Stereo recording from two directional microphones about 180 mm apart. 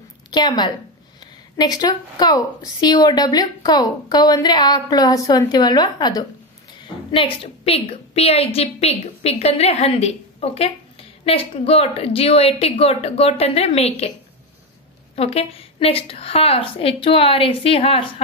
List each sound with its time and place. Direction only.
0.3 s a woman's voice: 25° left (ahead or behind)
7.6 s a woman's voice: 35° left (ahead or behind)
15.1 s a woman's voice: 35° left (ahead or behind)